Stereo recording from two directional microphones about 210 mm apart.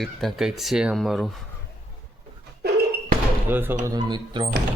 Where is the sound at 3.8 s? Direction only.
20° right (ahead or behind).